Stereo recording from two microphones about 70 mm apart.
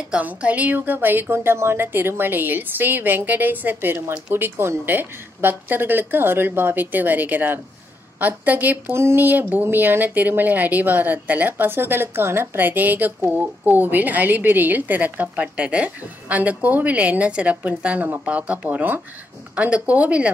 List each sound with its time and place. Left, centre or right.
0.1 s speech: centre